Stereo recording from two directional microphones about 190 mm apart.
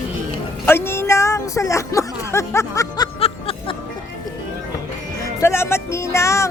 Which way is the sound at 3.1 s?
30° left (ahead or behind).